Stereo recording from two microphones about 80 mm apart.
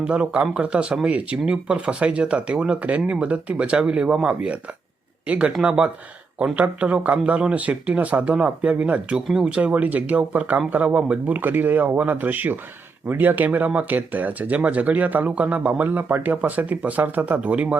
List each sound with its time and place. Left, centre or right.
0.0 s speech: centre
5.6 s speech: centre